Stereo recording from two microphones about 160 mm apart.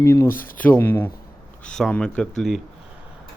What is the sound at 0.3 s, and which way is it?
Speech, 60° left (ahead or behind).